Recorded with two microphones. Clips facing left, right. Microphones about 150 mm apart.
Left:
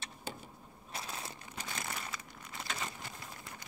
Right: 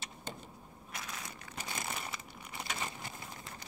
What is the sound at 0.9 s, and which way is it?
Crushing, 30° left (ahead or behind).